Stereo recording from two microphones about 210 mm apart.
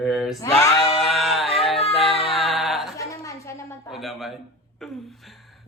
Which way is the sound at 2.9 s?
15° left (ahead or behind).